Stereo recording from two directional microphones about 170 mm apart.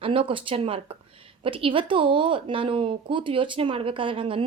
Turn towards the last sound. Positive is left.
turn(degrees=-30)  # may be behind; listen again after turning